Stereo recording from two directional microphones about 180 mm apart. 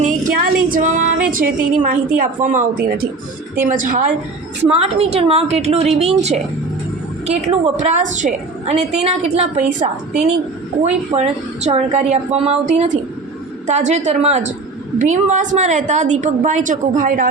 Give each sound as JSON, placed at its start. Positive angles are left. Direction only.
{"t": 0.0, "sound": "a woman's voice", "side_deg": -45}
{"t": 4.7, "sound": "a woman's voice", "side_deg": -35}